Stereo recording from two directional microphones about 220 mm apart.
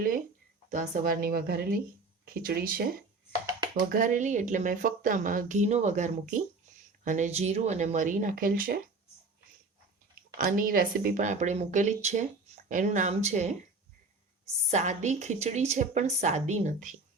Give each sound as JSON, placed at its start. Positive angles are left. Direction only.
{"t": 0.7, "sound": "speech", "side_deg": -35}
{"t": 3.9, "sound": "speech", "side_deg": -35}
{"t": 10.3, "sound": "speech", "side_deg": -40}
{"t": 14.7, "sound": "speech", "side_deg": -30}